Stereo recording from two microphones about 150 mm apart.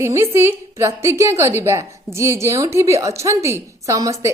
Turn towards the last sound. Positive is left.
turn(degrees=-20)  # may be behind; listen again after turning